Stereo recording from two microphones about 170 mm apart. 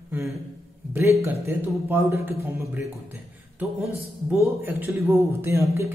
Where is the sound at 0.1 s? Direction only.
15° right (ahead or behind).